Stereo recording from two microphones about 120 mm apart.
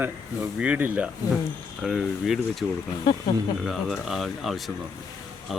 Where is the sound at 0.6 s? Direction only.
10° right (ahead or behind).